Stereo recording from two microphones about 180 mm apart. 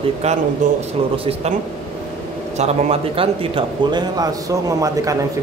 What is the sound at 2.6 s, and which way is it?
Speech, 35° right (ahead or behind).